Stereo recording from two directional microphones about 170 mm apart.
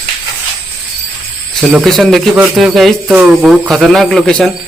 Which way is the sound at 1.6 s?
Centre (ahead or behind).